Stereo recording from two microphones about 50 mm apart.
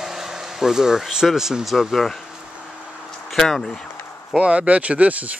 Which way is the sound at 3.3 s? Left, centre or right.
Centre.